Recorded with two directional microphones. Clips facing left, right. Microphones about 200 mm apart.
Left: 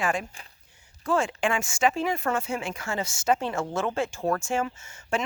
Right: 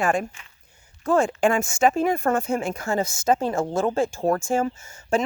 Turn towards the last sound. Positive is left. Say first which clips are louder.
# right 6 dB
turn(degrees=-35)  # may be behind; listen again after turning